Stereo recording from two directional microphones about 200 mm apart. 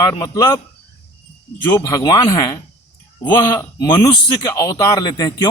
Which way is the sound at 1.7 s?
15° left (ahead or behind).